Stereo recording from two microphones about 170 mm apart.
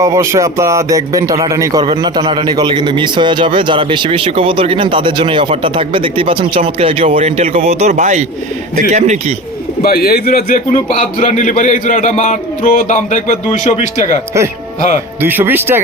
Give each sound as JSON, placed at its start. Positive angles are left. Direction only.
{"t": 0.0, "sound": "a man's voice", "side_deg": -15}
{"t": 9.8, "sound": "a man's voice", "side_deg": 65}
{"t": 10.9, "sound": "a man's voice", "side_deg": 40}
{"t": 15.2, "sound": "speech", "side_deg": -10}